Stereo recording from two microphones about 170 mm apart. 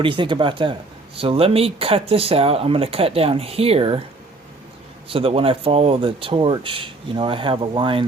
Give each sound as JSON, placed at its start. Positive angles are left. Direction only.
{"t": 0.0, "sound": "speech", "side_deg": -30}
{"t": 5.0, "sound": "speech", "side_deg": -35}